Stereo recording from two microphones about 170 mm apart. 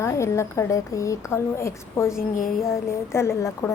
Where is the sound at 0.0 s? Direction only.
15° left (ahead or behind).